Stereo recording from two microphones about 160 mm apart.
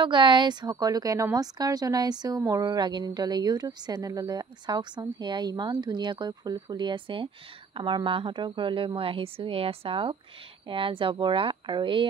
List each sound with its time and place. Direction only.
0.0 s a woman's voice: 30° right (ahead or behind)